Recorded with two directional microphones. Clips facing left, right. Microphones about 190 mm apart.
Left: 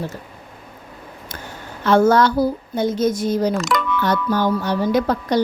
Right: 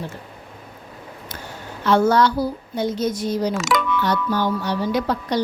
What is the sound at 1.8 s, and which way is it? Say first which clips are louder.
Speech: left 2 dB; 50° left (ahead or behind).